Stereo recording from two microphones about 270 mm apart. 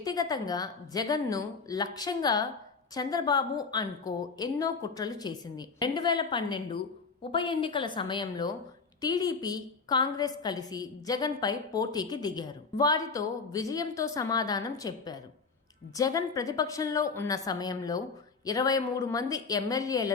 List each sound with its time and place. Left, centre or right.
0.0 s a woman's voice: centre